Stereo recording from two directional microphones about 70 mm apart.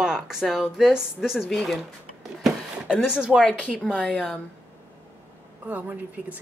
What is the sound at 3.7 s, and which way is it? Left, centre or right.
Speech, centre.